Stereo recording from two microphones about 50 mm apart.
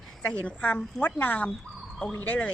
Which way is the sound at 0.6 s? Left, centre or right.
Left.